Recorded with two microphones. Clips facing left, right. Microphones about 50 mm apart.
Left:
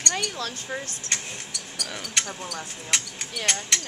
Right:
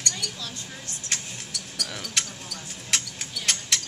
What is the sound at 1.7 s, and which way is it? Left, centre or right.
Speech, centre.